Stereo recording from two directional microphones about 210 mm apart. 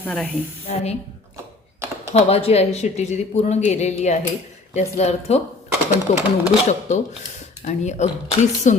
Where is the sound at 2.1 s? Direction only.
30° left (ahead or behind).